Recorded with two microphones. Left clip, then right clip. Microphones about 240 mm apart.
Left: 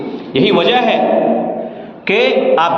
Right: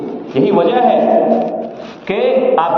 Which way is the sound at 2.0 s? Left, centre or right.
Left.